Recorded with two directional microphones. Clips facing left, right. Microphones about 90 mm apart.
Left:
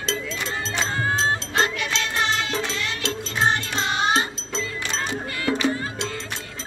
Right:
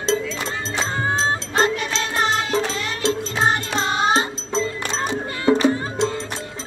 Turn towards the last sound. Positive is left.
turn(degrees=-35)  # may be behind; listen again after turning